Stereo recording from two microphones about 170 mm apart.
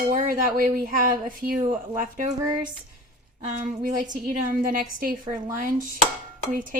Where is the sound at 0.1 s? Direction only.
55° right (ahead or behind).